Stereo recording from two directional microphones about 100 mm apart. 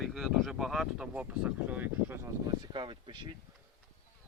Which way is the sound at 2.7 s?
50° right (ahead or behind).